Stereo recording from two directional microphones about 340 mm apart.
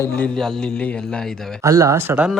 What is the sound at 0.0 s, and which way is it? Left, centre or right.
Speech, centre.